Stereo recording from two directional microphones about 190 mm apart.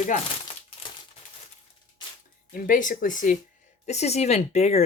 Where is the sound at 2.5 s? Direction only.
45° left (ahead or behind).